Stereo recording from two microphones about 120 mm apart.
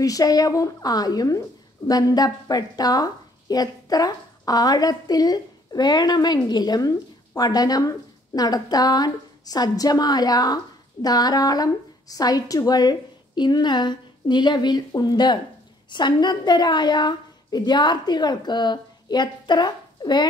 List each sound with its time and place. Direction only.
0.0 s a woman's voice: 30° left (ahead or behind)